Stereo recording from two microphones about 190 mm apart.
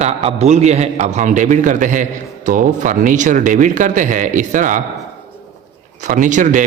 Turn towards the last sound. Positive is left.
turn(degrees=-40)  # may be behind; listen again after turning